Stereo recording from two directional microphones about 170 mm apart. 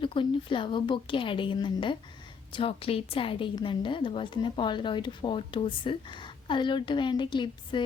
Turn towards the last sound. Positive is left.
turn(degrees=25)  # may be behind; listen again after turning